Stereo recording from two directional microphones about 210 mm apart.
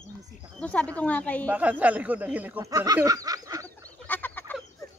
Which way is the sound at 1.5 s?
5° right (ahead or behind).